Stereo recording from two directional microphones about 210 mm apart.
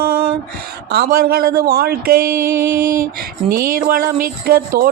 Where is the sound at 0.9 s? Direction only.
50° right (ahead or behind).